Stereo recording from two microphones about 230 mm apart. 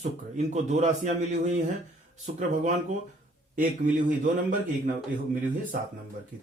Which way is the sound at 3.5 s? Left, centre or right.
Right.